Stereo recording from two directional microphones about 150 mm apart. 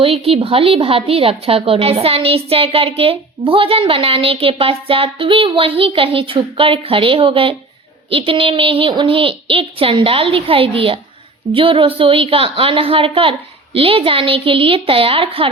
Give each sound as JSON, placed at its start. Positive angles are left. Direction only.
{"t": 0.0, "sound": "a woman's voice", "side_deg": -40}